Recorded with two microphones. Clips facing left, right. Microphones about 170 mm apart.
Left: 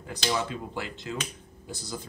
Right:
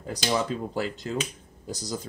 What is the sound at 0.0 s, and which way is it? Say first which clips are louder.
Speech: right 3 dB; 40° right (ahead or behind).